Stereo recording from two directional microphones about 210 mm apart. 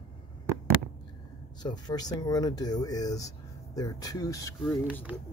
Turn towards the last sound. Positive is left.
turn(degrees=-5)  # may be behind; listen again after turning